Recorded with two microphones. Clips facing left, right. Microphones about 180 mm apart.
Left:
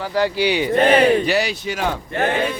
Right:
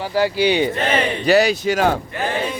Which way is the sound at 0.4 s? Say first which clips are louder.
Right 2 dB; 25° right (ahead or behind).